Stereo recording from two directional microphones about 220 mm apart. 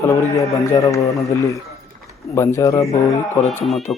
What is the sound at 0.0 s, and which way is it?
A man's voice, 15° left (ahead or behind).